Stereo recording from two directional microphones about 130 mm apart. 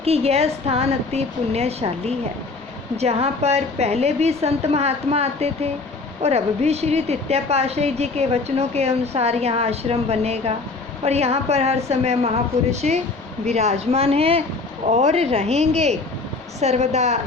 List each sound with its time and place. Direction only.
0.0 s a woman's voice: 50° right (ahead or behind)
14.8 s a woman's voice: 60° right (ahead or behind)